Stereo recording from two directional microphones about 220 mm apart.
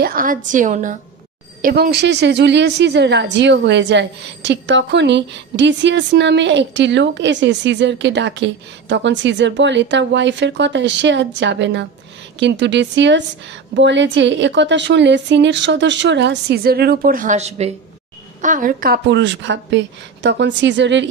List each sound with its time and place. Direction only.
0.0 s a woman's voice: 40° right (ahead or behind)